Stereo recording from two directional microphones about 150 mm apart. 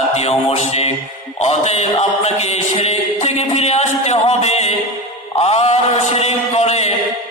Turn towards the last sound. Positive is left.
turn(degrees=45)  # may be behind; listen again after turning